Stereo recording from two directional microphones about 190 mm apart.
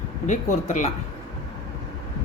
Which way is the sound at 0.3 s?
40° left (ahead or behind).